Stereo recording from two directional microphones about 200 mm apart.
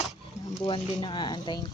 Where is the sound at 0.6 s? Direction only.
20° left (ahead or behind).